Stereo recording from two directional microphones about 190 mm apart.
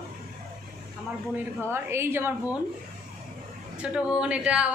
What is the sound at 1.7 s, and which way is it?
Speech, 15° right (ahead or behind).